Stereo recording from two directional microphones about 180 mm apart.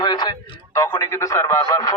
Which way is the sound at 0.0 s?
25° left (ahead or behind).